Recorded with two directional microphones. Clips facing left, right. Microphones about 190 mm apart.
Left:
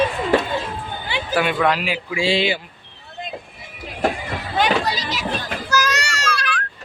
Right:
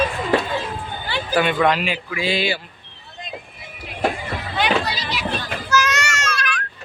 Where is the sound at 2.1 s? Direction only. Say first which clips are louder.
Left 4 dB; 25° left (ahead or behind).